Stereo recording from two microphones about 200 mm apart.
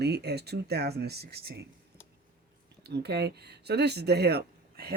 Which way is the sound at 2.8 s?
55° right (ahead or behind).